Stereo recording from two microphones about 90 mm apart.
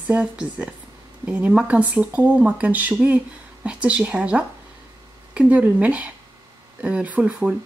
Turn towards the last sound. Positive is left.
turn(degrees=-15)  # may be behind; listen again after turning